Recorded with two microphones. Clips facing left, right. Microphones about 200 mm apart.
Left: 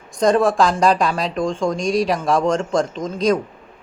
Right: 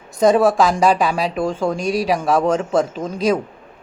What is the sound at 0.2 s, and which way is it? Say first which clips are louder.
Speech: right 2 dB; 5° right (ahead or behind).